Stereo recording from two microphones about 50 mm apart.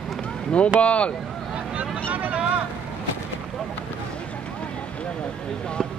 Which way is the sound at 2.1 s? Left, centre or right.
Right.